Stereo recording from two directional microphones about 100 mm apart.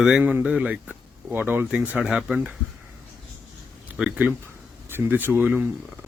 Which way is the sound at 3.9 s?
10° right (ahead or behind).